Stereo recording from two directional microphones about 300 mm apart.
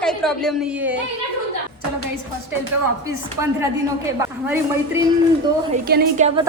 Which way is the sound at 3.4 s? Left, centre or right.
Right.